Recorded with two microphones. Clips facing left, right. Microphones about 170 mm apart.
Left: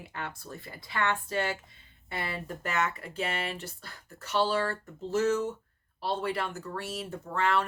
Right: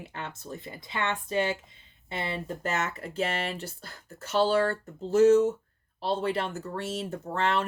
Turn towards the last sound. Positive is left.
turn(degrees=-25)  # may be behind; listen again after turning